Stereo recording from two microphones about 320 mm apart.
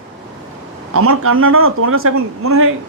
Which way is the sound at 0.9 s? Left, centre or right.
Right.